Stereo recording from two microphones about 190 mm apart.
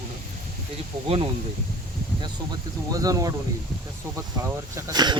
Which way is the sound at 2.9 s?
20° right (ahead or behind).